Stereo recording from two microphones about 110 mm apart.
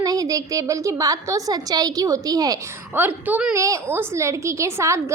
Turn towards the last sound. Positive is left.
turn(degrees=-25)  # may be behind; listen again after turning